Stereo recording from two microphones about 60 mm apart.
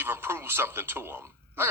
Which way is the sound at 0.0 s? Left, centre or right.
Right.